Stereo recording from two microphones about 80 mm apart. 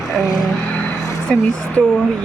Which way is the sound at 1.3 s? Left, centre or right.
Centre.